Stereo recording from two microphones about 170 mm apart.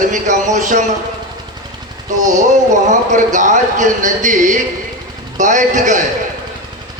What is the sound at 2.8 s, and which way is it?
Speech, 45° right (ahead or behind).